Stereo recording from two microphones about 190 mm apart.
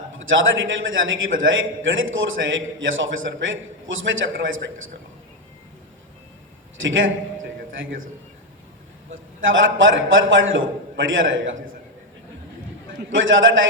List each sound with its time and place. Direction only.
0.1 s a man's voice: 90° right
6.7 s a man's voice: 90° right
9.4 s a man's voice: 90° right
13.1 s a man's voice: 90° right